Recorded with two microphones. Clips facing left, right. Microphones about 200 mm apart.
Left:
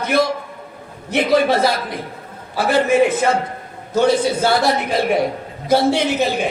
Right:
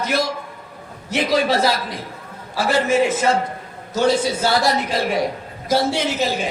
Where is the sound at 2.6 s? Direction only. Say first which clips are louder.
Left 3 dB; 55° left (ahead or behind).